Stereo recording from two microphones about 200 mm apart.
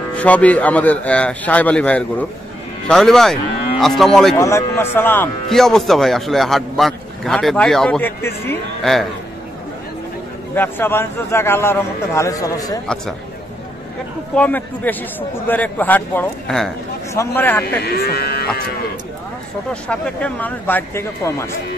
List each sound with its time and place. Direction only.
0.1 s a man's voice: 5° left (ahead or behind)
4.4 s speech: 15° left (ahead or behind)
10.5 s a man's voice: 10° left (ahead or behind)
12.8 s speech: 5° left (ahead or behind)
14.3 s a man's voice: 10° left (ahead or behind)
17.1 s a man's voice: 10° left (ahead or behind)
17.8 s speech: 50° left (ahead or behind)
19.7 s a man's voice: 5° left (ahead or behind)